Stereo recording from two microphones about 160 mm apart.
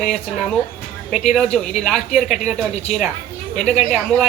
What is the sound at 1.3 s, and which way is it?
Speech, centre (ahead or behind).